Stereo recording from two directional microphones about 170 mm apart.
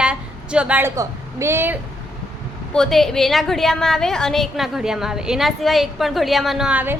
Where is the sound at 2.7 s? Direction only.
Centre (ahead or behind).